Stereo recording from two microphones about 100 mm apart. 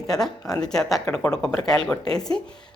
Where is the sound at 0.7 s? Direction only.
5° left (ahead or behind).